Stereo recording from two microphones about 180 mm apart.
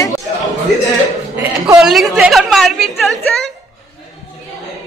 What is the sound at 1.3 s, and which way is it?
A woman's voice, 10° right (ahead or behind).